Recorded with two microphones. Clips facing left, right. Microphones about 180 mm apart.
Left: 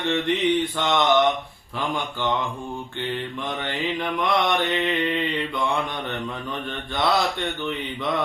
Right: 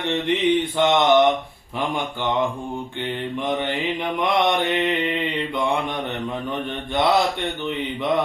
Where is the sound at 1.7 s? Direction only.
20° right (ahead or behind).